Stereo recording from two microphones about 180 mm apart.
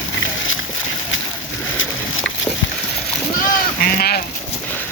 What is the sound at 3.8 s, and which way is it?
Sheep, 50° left (ahead or behind).